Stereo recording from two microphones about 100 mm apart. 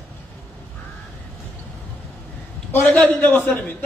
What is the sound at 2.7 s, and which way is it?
A man's voice, 20° left (ahead or behind).